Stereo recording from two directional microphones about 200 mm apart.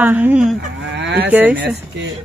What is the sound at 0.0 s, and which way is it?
Speech, 5° right (ahead or behind).